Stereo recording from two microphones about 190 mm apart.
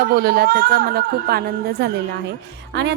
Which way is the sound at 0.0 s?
55° right (ahead or behind).